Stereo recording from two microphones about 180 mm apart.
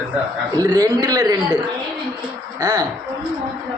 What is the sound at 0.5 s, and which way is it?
Speech, 20° right (ahead or behind).